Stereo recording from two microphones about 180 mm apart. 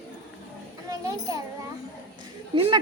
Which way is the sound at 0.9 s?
20° right (ahead or behind).